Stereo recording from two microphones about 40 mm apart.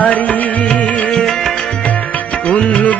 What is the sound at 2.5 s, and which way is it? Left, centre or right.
Music, left.